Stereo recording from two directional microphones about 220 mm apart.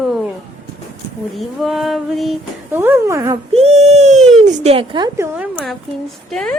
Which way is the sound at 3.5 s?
30° right (ahead or behind).